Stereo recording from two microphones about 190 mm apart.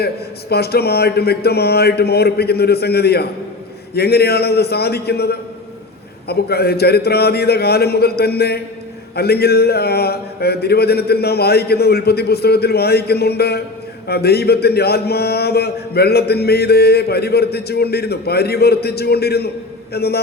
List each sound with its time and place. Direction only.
0.5 s speech: 55° left (ahead or behind)